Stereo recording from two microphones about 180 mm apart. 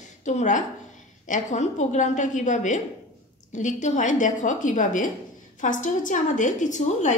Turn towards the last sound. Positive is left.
turn(degrees=45)  # may be behind; listen again after turning